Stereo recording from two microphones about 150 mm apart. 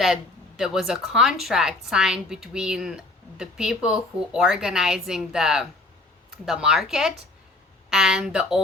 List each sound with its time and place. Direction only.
0.0 s speech: centre (ahead or behind)